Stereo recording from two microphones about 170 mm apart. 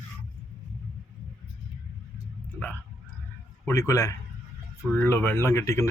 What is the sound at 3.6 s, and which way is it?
Speech, 20° left (ahead or behind).